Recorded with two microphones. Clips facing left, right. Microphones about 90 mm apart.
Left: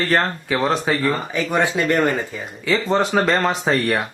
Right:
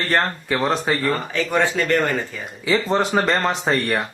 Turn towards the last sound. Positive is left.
turn(degrees=0)  # may be behind; listen again after turning